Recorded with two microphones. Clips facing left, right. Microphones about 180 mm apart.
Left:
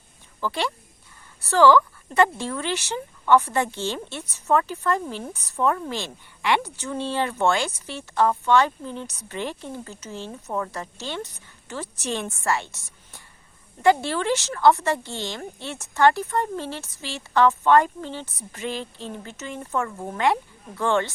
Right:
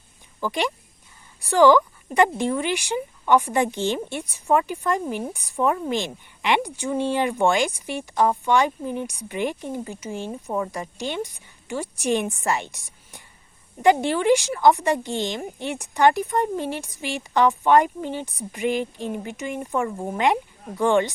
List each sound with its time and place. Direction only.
0.3 s speech: 15° right (ahead or behind)